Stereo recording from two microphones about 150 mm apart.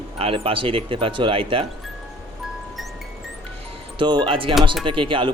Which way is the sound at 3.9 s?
30° right (ahead or behind).